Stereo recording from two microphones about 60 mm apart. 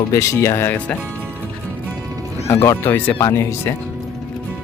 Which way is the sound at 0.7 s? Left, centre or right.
Left.